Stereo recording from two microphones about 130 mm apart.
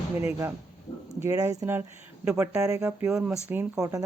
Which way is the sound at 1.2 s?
25° right (ahead or behind).